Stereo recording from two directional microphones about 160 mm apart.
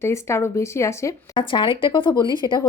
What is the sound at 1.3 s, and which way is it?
Speech, 30° left (ahead or behind).